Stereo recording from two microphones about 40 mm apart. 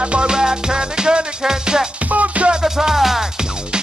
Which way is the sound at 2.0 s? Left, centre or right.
Right.